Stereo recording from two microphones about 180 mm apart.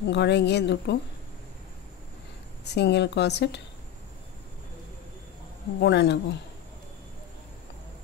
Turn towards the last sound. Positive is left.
turn(degrees=70)  # may be behind; listen again after turning